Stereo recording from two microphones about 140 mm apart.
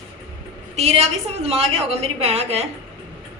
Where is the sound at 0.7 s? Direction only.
50° right (ahead or behind).